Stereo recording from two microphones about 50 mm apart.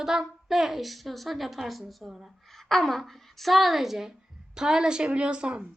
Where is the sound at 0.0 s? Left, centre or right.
Centre.